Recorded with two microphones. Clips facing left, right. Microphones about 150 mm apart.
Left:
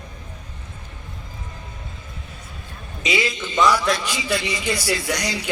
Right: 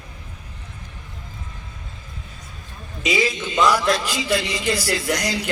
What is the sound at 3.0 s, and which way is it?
Speech, centre (ahead or behind).